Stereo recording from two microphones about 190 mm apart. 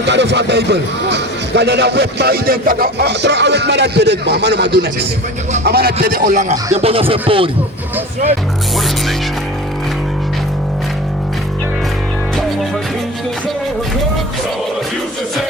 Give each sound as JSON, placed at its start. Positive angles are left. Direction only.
{"t": 0.1, "sound": "a man's voice", "side_deg": -65}